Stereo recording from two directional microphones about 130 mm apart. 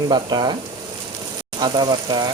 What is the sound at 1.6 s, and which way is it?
Speech, 35° right (ahead or behind).